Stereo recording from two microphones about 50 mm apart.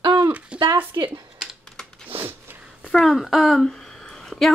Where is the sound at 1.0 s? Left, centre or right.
Right.